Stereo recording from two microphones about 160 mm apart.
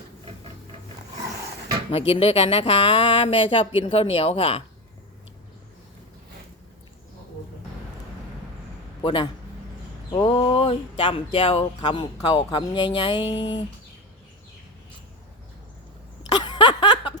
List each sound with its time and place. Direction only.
1.9 s speech: 40° left (ahead or behind)
9.0 s a man's voice: 30° left (ahead or behind)
16.3 s a sound: 25° left (ahead or behind)